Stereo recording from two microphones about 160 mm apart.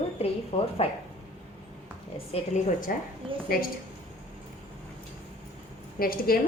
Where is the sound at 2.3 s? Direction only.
55° left (ahead or behind).